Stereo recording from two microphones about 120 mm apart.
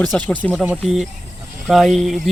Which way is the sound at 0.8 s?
5° right (ahead or behind).